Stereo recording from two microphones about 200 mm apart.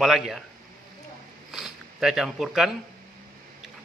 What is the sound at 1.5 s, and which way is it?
Zipper, centre (ahead or behind).